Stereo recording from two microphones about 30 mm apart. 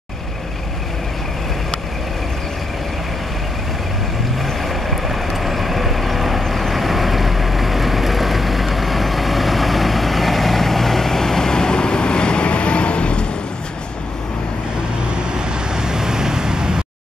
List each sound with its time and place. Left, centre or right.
4.4 s vehicle: centre; by 13.3 s left
15.3 s vehicle: right